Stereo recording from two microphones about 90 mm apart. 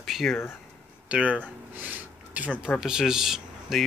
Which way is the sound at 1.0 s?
15° right (ahead or behind).